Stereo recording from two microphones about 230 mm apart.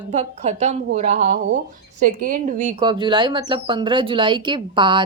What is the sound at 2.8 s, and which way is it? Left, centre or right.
A woman's voice, centre.